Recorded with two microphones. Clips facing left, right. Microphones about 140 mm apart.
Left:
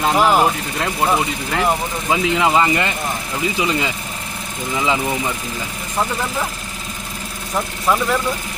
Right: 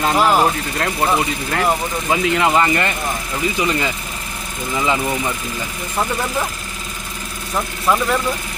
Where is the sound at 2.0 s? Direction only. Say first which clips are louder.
Even; 15° left (ahead or behind).